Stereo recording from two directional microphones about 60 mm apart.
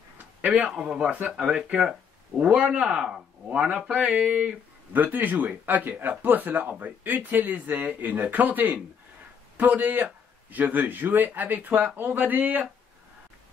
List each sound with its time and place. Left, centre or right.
0.7 s a man's voice: centre
4.9 s a man's voice: right